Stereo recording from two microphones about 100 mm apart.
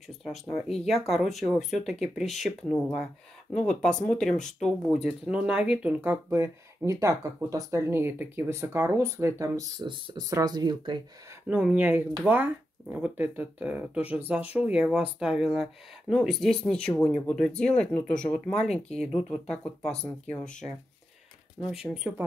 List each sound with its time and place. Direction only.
0.5 s speech: centre (ahead or behind)
2.7 s speech: 10° left (ahead or behind)
5.0 s speech: 10° right (ahead or behind)
6.3 s speech: 30° right (ahead or behind)
9.8 s speech: 50° right (ahead or behind)
10.2 s speech: 40° right (ahead or behind)
11.4 s speech: 15° right (ahead or behind); by 20.5 s 10° left (ahead or behind)
21.5 s speech: 10° right (ahead or behind)